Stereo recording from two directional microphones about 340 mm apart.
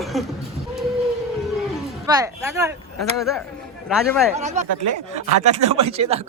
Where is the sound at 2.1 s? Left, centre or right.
Centre.